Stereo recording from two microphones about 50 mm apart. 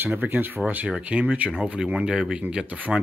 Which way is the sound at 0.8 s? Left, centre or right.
Right.